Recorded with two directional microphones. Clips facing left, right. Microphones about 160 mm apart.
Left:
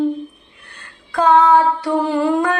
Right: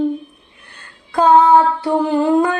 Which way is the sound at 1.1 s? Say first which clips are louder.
Right 2 dB; 25° right (ahead or behind).